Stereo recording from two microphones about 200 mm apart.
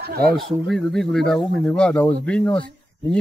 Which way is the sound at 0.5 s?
Centre (ahead or behind).